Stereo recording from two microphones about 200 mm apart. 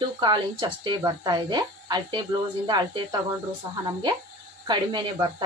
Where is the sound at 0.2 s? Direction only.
20° right (ahead or behind).